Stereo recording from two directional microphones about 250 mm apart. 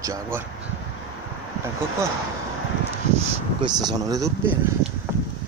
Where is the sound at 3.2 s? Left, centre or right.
Centre.